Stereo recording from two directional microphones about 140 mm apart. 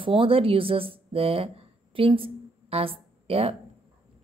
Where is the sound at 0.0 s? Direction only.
40° right (ahead or behind).